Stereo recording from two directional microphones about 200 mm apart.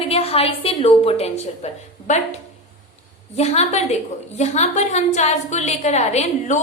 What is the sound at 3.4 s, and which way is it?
A woman's voice, 35° left (ahead or behind).